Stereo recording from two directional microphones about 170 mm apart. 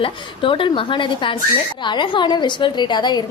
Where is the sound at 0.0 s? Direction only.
30° left (ahead or behind).